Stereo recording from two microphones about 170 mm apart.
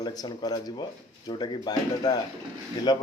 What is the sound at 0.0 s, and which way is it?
A man's voice, 20° left (ahead or behind).